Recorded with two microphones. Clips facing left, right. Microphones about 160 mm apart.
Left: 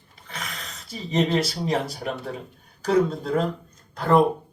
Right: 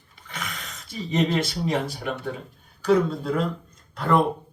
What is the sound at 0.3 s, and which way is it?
Speech, 35° left (ahead or behind).